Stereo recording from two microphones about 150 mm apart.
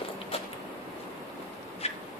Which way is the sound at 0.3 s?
40° left (ahead or behind).